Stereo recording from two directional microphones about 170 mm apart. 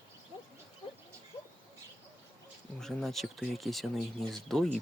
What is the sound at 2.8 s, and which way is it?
Speech, centre (ahead or behind).